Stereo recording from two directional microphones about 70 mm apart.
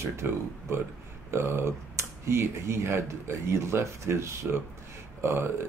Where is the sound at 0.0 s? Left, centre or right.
Right.